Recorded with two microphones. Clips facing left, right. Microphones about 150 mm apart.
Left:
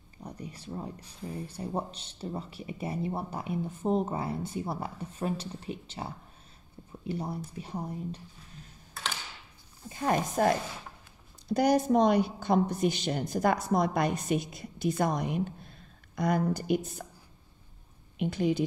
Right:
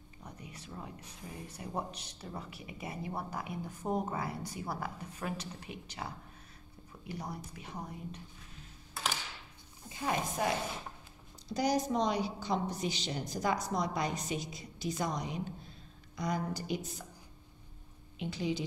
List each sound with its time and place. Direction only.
0.2 s speech: 35° left (ahead or behind)
9.8 s speech: 50° left (ahead or behind)
11.5 s a woman's voice: 55° left (ahead or behind)
18.2 s speech: 55° left (ahead or behind)